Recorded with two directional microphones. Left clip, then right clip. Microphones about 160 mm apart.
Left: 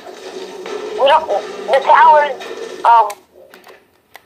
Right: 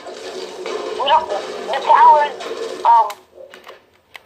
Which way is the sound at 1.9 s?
30° left (ahead or behind).